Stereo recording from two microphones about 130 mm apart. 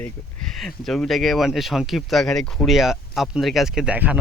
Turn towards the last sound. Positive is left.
turn(degrees=-10)  # may be behind; listen again after turning